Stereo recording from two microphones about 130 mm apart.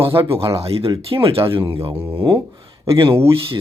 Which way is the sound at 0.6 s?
50° right (ahead or behind).